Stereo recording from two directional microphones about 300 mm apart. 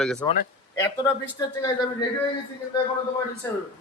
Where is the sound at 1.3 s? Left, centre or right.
Centre.